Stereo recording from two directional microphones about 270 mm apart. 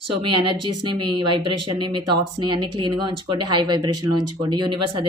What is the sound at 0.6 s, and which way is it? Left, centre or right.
Speech, right.